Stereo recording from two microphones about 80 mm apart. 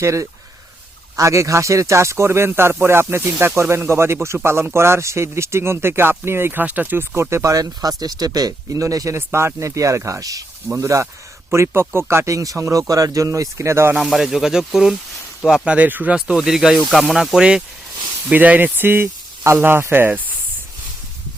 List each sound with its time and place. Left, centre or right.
0.0 s speech: right
9.1 s speech: right
13.9 s speech: centre; by 16.1 s right
16.3 s speech: centre
18.3 s speech: centre